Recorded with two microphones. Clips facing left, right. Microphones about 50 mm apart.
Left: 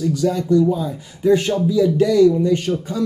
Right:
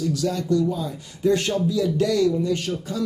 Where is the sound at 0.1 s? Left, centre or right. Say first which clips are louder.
Left 7 dB; centre.